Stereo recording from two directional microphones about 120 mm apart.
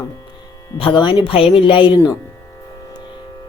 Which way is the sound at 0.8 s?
45° left (ahead or behind).